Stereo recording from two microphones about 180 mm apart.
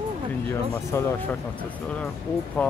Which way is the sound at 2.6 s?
10° left (ahead or behind).